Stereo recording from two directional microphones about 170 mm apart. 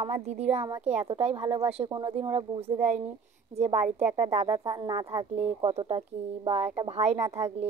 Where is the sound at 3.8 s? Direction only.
10° right (ahead or behind).